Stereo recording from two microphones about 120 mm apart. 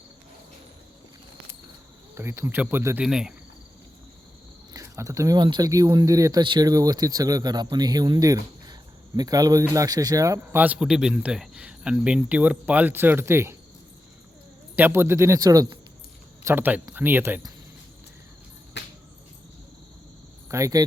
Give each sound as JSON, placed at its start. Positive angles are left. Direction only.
{"t": 2.1, "sound": "speech", "side_deg": -25}
{"t": 3.0, "sound": "cricket", "side_deg": -5}
{"t": 4.7, "sound": "a sound", "side_deg": -25}
{"t": 5.4, "sound": "speech", "side_deg": -35}
{"t": 10.6, "sound": "speech", "side_deg": -10}
{"t": 14.8, "sound": "speech", "side_deg": -20}
{"t": 20.5, "sound": "speech", "side_deg": -25}